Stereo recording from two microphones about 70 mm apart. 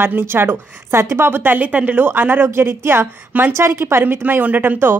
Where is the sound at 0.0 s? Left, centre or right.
Right.